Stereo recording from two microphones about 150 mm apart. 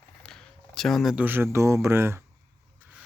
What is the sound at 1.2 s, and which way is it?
Speech, 15° right (ahead or behind).